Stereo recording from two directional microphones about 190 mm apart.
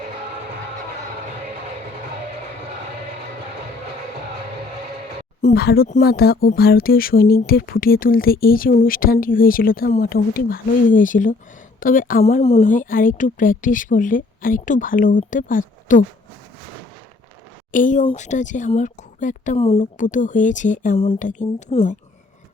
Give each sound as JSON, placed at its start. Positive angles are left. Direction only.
{"t": 5.4, "sound": "speech", "side_deg": 40}
{"t": 5.6, "sound": "speech", "side_deg": 50}
{"t": 12.4, "sound": "speech", "side_deg": 30}
{"t": 17.7, "sound": "speech", "side_deg": 45}